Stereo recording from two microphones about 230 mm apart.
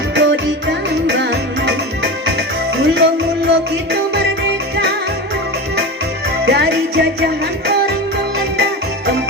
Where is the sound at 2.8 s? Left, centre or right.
Right.